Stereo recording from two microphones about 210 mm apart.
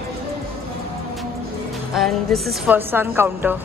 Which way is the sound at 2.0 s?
Centre (ahead or behind).